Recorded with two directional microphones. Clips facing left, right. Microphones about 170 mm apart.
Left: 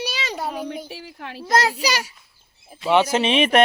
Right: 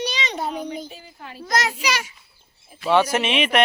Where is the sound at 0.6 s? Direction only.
70° left (ahead or behind).